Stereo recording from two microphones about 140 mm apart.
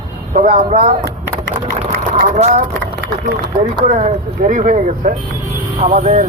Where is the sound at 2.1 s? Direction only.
65° right (ahead or behind).